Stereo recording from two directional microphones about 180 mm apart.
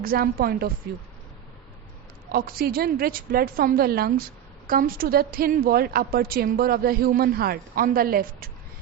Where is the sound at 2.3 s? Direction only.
55° right (ahead or behind).